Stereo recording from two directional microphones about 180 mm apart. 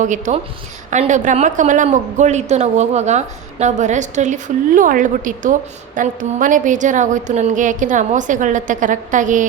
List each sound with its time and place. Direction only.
0.0 s a woman's voice: 45° right (ahead or behind)